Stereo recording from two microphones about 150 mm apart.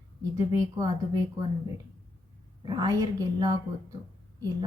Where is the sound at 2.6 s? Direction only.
25° right (ahead or behind).